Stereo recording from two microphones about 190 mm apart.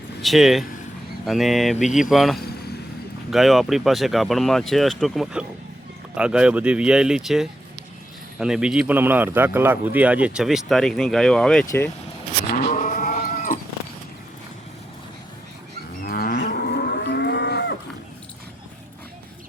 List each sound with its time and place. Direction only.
0.2 s speech: centre (ahead or behind)
11.6 s speech: 15° left (ahead or behind)
12.5 s cat: 40° left (ahead or behind)
16.0 s moo: 55° left (ahead or behind)